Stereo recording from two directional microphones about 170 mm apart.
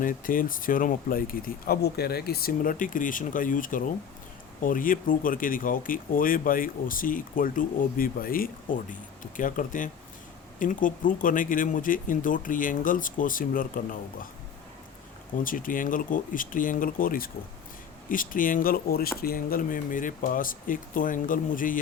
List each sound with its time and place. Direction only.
0.0 s speech: 55° left (ahead or behind)
15.4 s speech: 55° left (ahead or behind)